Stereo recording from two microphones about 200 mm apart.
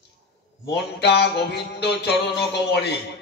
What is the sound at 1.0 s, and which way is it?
Music, 55° left (ahead or behind).